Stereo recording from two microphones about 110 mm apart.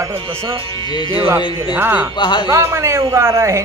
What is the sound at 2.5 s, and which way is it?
Speech, 25° right (ahead or behind).